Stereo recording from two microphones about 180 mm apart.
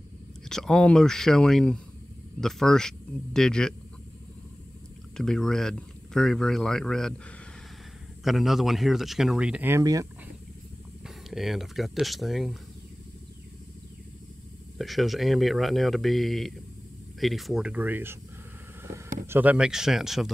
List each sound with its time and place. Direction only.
0.5 s speech: 5° left (ahead or behind)
5.1 s speech: 5° left (ahead or behind)
8.2 s speech: centre (ahead or behind); by 10.0 s 20° right (ahead or behind)
11.2 s speech: centre (ahead or behind)
14.8 s speech: centre (ahead or behind)
19.2 s speech: 10° right (ahead or behind)